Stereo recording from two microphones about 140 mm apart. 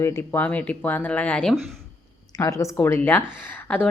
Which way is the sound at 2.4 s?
25° left (ahead or behind).